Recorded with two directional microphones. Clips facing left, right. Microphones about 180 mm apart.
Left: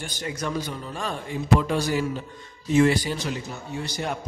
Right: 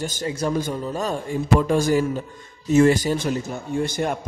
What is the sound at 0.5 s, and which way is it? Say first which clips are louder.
Speech: right 6 dB; 45° right (ahead or behind).